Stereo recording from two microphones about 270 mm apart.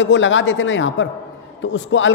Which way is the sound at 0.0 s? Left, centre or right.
Left.